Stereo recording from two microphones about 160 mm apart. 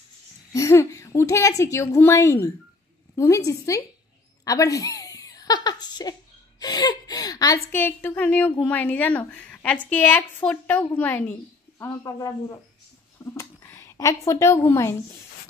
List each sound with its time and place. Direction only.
0.5 s a woman's voice: 20° left (ahead or behind)
11.8 s a woman's voice: 20° left (ahead or behind)